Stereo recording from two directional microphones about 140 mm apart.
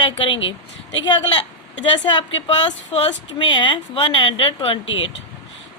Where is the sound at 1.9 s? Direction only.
35° left (ahead or behind).